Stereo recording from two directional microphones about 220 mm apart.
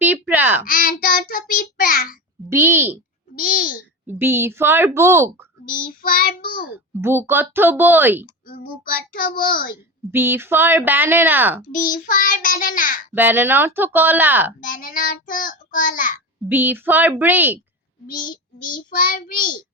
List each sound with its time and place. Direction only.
0.0 s a sound: 10° right (ahead or behind)
0.6 s child singing: 40° left (ahead or behind)
2.5 s speech: 10° right (ahead or behind)
3.3 s a child's voice: 40° left (ahead or behind)
4.0 s speech: 10° right (ahead or behind)
5.6 s child singing: 40° left (ahead or behind)
6.7 s speech: 10° right (ahead or behind)
8.8 s child singing: 40° left (ahead or behind)
10.1 s speech: 10° right (ahead or behind)
11.7 s child singing: 35° left (ahead or behind)
13.1 s speech: 10° right (ahead or behind)
14.6 s child singing: 40° left (ahead or behind)
16.5 s speech: 10° right (ahead or behind)
18.2 s child singing: 40° left (ahead or behind)